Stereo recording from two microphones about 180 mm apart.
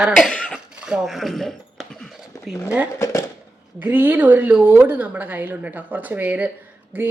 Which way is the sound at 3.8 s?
10° right (ahead or behind).